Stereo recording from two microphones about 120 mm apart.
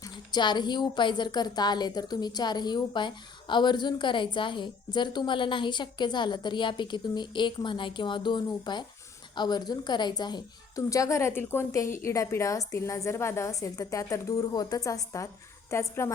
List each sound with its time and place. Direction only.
0.0 s a woman's voice: 35° left (ahead or behind)